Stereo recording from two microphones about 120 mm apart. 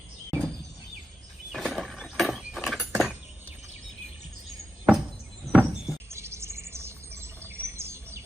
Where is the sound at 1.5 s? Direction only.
Centre (ahead or behind).